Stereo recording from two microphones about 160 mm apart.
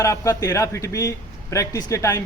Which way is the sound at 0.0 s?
20° left (ahead or behind).